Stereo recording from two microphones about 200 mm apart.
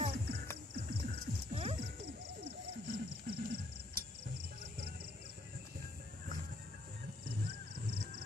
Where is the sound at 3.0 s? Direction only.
50° right (ahead or behind).